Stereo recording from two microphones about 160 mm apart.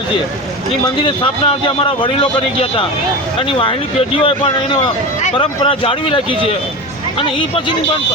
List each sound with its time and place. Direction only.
1.0 s a man's voice: 30° left (ahead or behind)
3.4 s a man's voice: 35° left (ahead or behind)